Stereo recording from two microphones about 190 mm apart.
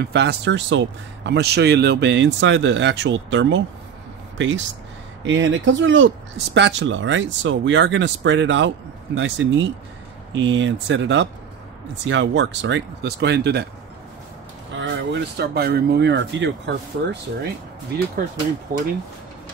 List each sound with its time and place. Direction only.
0.0 s speech: 60° right (ahead or behind)
14.8 s speech: 70° right (ahead or behind)
18.7 s speech: 50° right (ahead or behind)